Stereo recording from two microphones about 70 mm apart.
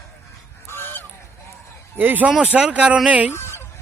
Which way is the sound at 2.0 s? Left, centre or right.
Right.